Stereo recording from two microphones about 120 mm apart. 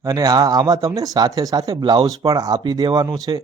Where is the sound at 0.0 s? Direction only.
30° right (ahead or behind).